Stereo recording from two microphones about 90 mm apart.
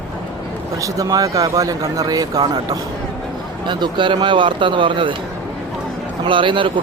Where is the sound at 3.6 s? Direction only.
60° right (ahead or behind).